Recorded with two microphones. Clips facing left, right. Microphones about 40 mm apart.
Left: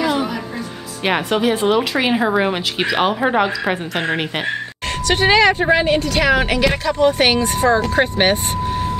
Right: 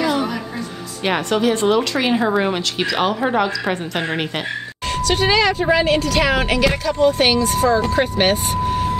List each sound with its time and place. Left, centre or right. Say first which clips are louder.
0.0 s music: even; centre
1.0 s speech: left 1 dB; centre
4.9 s a woman's voice: left 2 dB; left
6.9 s speech: left 1 dB; left
7.9 s a woman's voice: left 1 dB; left